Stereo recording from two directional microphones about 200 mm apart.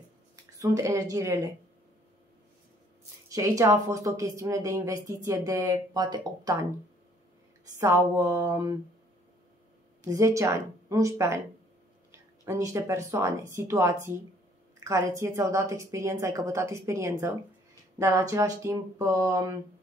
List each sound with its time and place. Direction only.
0.6 s speech: 15° right (ahead or behind)
3.3 s speech: 15° right (ahead or behind)
7.6 s speech: 15° right (ahead or behind)
10.0 s speech: 15° right (ahead or behind)